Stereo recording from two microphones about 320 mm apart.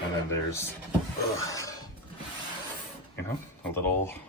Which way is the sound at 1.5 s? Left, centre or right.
Centre.